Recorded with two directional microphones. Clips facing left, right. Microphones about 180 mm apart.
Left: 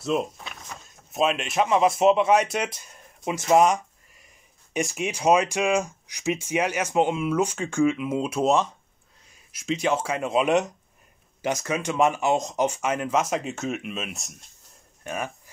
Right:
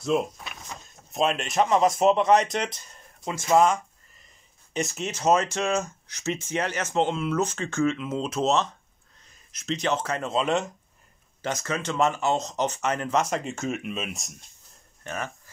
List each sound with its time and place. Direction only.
0.0 s speech: centre (ahead or behind)
15.0 s speech: 10° left (ahead or behind)